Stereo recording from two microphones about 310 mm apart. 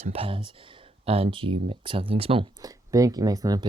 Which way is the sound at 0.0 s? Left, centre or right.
Centre.